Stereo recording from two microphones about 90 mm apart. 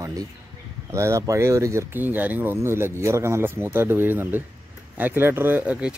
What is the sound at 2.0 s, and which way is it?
Speech, 20° right (ahead or behind).